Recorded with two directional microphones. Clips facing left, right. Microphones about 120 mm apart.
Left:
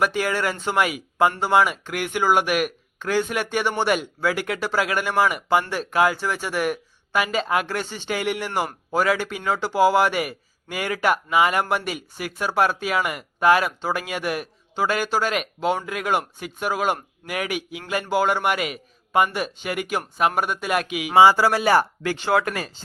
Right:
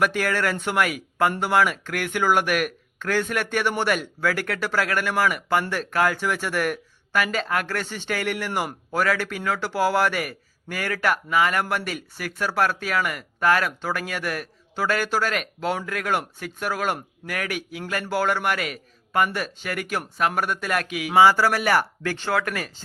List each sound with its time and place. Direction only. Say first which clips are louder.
0.2 s speech: even; 10° left (ahead or behind); by 22.8 s 25° left (ahead or behind)